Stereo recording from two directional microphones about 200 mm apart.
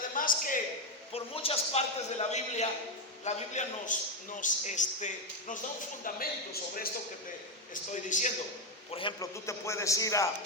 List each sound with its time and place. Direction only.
0.2 s a man's voice: 45° left (ahead or behind)
1.1 s a man's voice: 30° left (ahead or behind)
8.9 s a man's voice: 25° left (ahead or behind)